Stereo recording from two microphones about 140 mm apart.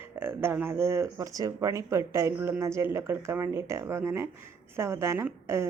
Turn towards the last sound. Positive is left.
turn(degrees=-15)  # may be behind; listen again after turning